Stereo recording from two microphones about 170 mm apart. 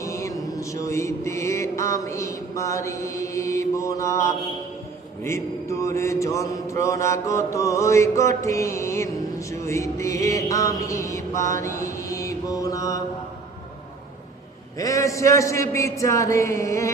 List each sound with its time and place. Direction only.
0.0 s mantra: 20° left (ahead or behind)
14.8 s mantra: 20° left (ahead or behind)